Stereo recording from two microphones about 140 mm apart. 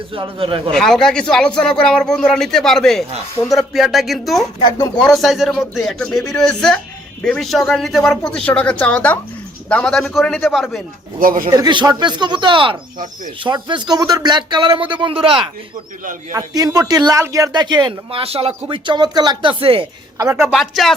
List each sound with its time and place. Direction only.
0.1 s speech: 40° right (ahead or behind)
0.7 s speech: 5° left (ahead or behind)
11.2 s speech: 80° right
11.5 s speech: 30° right (ahead or behind)
16.3 s speech: 25° right (ahead or behind)
18.2 s speech: 45° right (ahead or behind)
20.5 s speech: centre (ahead or behind)